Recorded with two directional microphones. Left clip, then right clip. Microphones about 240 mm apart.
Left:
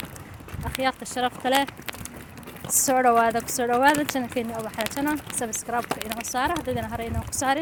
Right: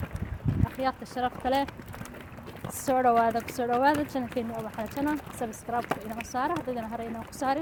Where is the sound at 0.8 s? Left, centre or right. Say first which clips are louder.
Left 5 dB; left.